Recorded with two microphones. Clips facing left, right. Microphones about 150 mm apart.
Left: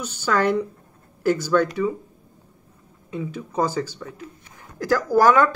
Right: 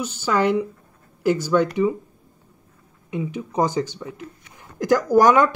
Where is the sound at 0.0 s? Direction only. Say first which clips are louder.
Right 1 dB; 10° right (ahead or behind).